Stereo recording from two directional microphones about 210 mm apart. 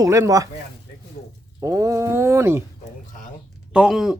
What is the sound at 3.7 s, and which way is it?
Speech, 5° right (ahead or behind).